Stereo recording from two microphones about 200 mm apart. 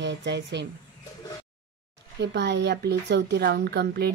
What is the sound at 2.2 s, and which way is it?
A woman's voice, 60° right (ahead or behind).